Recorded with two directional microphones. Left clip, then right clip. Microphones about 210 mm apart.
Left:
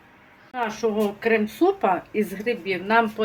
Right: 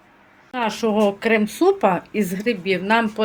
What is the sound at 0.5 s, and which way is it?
Speech, 45° right (ahead or behind).